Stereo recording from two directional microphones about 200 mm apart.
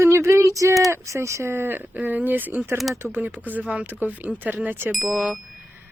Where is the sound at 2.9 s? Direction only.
10° right (ahead or behind).